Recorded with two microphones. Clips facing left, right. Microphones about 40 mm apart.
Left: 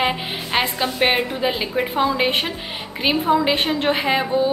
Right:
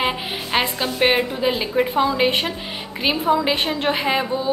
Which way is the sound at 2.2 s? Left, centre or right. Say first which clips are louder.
Right 1 dB; centre.